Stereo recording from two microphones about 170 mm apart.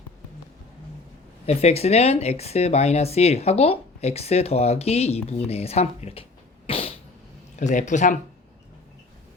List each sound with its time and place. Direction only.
1.5 s speech: 35° left (ahead or behind)
6.7 s sneeze: 35° left (ahead or behind)
7.6 s speech: 45° left (ahead or behind)